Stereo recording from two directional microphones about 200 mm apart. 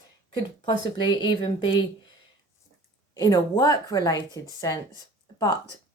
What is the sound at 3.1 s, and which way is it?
Speech, 15° left (ahead or behind).